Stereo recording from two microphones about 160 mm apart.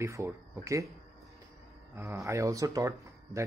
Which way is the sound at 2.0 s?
15° right (ahead or behind).